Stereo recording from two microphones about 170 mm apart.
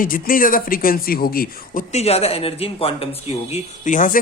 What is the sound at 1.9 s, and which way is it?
Speech, 40° left (ahead or behind).